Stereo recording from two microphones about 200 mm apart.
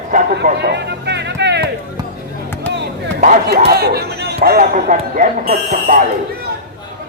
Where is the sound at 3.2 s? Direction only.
45° right (ahead or behind).